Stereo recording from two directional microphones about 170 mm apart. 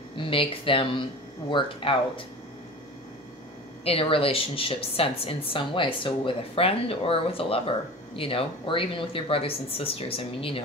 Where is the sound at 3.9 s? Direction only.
35° left (ahead or behind).